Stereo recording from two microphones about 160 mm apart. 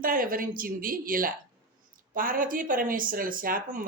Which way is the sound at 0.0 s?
60° right (ahead or behind).